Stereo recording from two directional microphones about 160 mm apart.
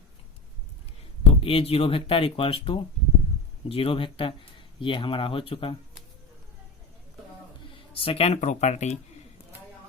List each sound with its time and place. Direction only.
1.2 s speech: 35° left (ahead or behind)
7.8 s speech: 35° left (ahead or behind)